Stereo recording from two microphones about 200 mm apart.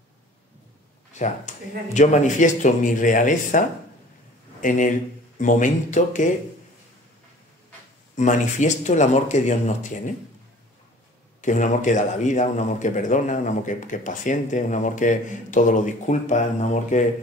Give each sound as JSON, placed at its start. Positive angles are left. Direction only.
{"t": 1.1, "sound": "a man's voice", "side_deg": 35}
{"t": 8.2, "sound": "a man's voice", "side_deg": 35}
{"t": 11.4, "sound": "a man's voice", "side_deg": 40}